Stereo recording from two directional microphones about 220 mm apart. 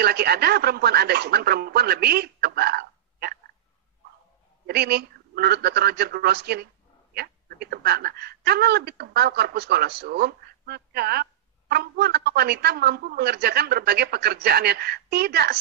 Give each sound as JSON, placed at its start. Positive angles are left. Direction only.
{"t": 0.0, "sound": "speech", "side_deg": -45}
{"t": 4.6, "sound": "speech", "side_deg": -45}